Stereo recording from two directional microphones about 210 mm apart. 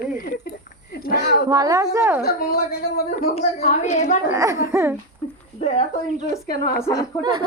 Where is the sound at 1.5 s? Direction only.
15° right (ahead or behind).